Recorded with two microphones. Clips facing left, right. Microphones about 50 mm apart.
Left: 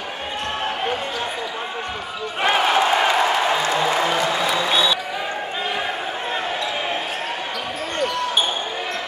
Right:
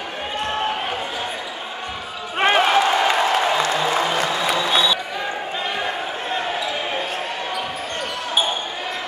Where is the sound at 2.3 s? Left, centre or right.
Right.